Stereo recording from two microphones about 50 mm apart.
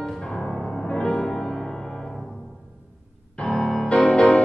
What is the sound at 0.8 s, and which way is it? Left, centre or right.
Music, centre.